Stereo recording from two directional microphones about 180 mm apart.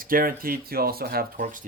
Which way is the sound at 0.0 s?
50° right (ahead or behind).